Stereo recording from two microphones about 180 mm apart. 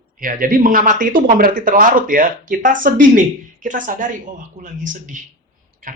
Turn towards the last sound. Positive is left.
turn(degrees=-45)  # may be behind; listen again after turning